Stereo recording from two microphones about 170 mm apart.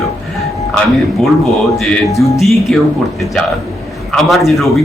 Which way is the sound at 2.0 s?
20° left (ahead or behind).